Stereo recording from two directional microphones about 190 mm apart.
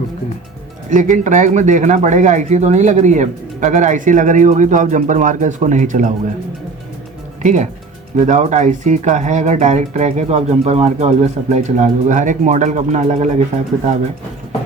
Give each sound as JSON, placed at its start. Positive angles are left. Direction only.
{"t": 0.9, "sound": "speech", "side_deg": -40}
{"t": 7.4, "sound": "speech", "side_deg": -40}